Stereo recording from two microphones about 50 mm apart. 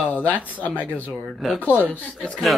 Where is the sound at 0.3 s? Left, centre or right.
Right.